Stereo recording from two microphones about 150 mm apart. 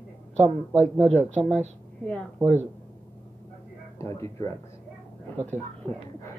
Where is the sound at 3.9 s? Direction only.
20° left (ahead or behind).